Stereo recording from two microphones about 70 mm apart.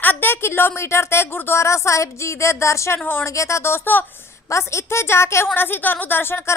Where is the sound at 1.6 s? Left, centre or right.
Left.